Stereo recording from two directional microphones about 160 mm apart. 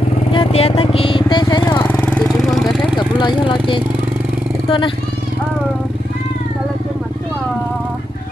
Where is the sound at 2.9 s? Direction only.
30° left (ahead or behind).